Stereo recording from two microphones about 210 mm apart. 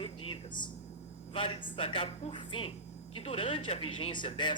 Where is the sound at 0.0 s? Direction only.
25° left (ahead or behind).